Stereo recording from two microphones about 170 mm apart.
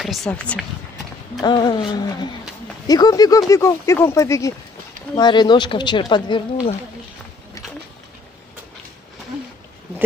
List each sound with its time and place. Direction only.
0.0 s speech: centre (ahead or behind)
1.4 s speech: 25° left (ahead or behind)